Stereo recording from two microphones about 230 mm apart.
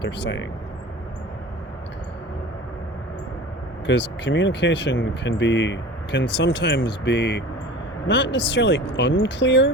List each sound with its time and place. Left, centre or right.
0.0 s speech: left
3.8 s speech: left